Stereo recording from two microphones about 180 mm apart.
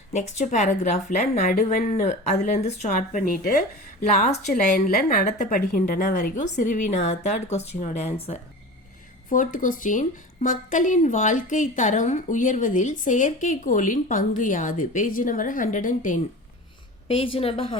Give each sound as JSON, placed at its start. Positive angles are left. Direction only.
{"t": 0.1, "sound": "speech", "side_deg": 40}
{"t": 9.3, "sound": "speech", "side_deg": 45}
{"t": 17.1, "sound": "speech", "side_deg": 30}